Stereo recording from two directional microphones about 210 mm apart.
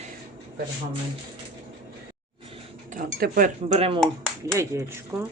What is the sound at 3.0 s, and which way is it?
Speech, 40° right (ahead or behind).